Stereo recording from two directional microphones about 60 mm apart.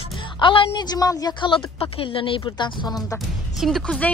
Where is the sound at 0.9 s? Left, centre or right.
Left.